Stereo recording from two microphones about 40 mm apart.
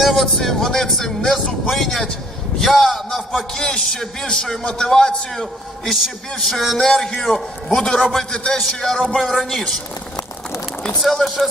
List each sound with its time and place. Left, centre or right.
0.0 s a man's voice: centre
3.6 s a man's voice: centre
3.8 s a man's voice: centre
5.9 s a man's voice: centre
7.7 s a man's voice: centre
11.0 s a man's voice: centre